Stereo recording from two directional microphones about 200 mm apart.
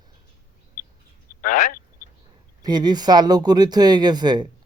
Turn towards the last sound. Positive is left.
turn(degrees=-20)  # may be behind; listen again after turning